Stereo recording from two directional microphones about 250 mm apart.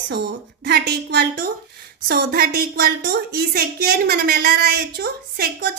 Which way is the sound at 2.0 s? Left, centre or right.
Right.